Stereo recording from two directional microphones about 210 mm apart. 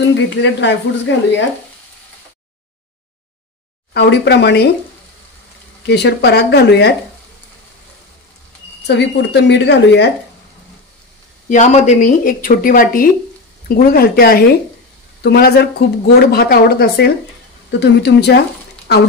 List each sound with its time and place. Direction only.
0.1 s speech: 60° left (ahead or behind)
3.9 s speech: 55° left (ahead or behind)
5.9 s speech: 55° left (ahead or behind)
8.8 s speech: 55° left (ahead or behind)
11.4 s speech: 35° left (ahead or behind); by 18.4 s 55° left (ahead or behind)